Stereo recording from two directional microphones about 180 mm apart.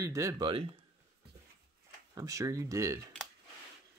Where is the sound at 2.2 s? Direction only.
20° right (ahead or behind).